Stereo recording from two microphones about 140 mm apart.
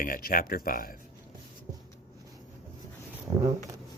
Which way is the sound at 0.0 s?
90° left.